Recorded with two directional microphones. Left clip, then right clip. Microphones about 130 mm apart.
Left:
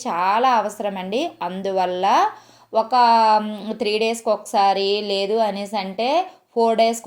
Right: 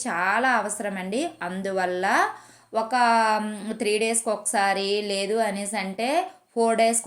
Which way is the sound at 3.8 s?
20° right (ahead or behind).